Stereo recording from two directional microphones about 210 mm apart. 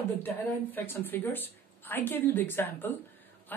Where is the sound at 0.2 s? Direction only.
10° left (ahead or behind).